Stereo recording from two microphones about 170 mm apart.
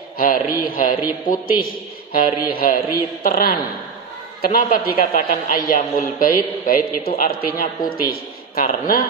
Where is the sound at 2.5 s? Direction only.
60° left (ahead or behind).